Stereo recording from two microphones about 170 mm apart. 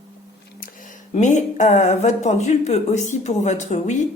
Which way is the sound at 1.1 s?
45° left (ahead or behind).